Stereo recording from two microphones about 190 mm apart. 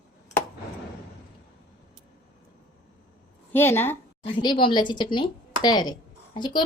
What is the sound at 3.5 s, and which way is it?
Speech, 10° left (ahead or behind).